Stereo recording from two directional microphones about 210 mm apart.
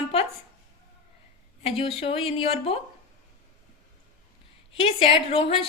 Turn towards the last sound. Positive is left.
turn(degrees=30)  # may be behind; listen again after turning